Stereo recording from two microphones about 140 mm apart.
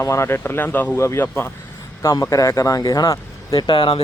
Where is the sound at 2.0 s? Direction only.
25° left (ahead or behind).